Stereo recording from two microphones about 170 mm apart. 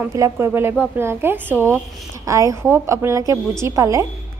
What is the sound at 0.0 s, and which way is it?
A woman's voice, 15° right (ahead or behind).